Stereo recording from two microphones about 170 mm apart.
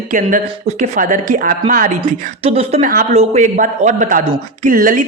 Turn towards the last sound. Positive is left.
turn(degrees=-55)  # may be behind; listen again after turning